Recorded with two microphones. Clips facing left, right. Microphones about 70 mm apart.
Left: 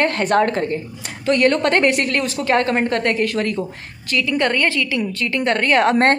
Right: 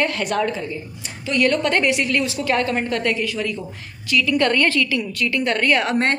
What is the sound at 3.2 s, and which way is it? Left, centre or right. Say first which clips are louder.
Speech: left 5 dB; left.